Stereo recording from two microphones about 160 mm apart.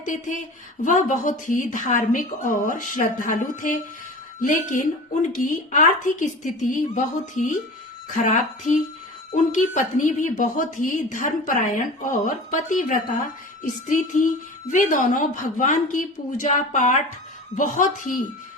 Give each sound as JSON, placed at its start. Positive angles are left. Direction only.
{"t": 0.0, "sound": "a woman's voice", "side_deg": 55}